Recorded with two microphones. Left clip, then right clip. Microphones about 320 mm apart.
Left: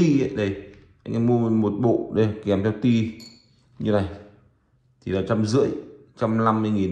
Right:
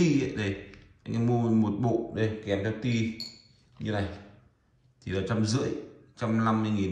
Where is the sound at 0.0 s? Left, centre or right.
Centre.